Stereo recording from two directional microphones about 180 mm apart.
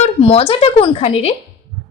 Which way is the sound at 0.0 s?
30° left (ahead or behind).